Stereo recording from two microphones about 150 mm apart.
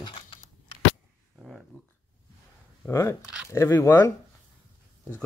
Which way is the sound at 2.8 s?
20° left (ahead or behind).